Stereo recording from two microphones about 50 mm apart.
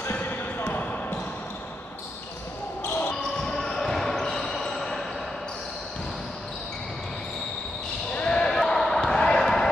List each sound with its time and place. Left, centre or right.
0.0 s basketball bounce: left
2.8 s basketball bounce: left
3.2 s basketball bounce: centre
8.1 s basketball bounce: centre